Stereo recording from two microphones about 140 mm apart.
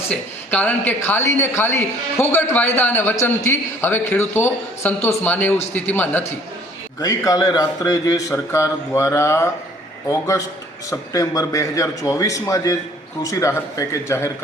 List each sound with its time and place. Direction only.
0.1 s a man's voice: 10° left (ahead or behind)
7.0 s speech: 25° left (ahead or behind)